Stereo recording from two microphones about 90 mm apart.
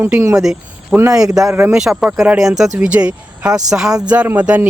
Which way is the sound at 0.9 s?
40° right (ahead or behind).